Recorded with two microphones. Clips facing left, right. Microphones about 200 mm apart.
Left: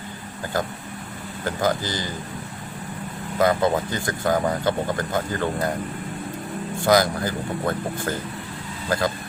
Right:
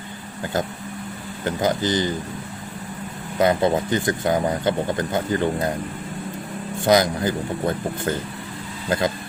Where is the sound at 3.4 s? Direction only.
20° right (ahead or behind).